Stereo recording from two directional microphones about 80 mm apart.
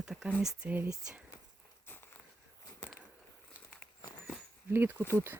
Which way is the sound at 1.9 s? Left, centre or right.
Left.